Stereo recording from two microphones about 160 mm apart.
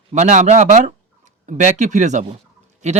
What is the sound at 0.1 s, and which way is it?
Speech, 45° right (ahead or behind).